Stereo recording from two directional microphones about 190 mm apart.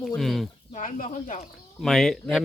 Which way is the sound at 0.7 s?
45° left (ahead or behind).